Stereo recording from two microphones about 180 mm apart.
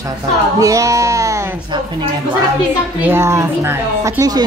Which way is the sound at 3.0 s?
15° right (ahead or behind).